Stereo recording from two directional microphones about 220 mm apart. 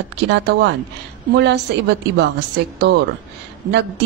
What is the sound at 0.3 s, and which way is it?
A woman's voice, 50° right (ahead or behind).